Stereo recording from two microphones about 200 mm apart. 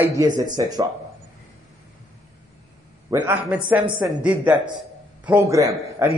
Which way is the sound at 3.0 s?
15° right (ahead or behind).